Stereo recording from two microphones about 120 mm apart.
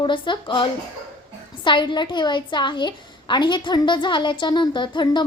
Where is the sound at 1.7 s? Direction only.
40° left (ahead or behind).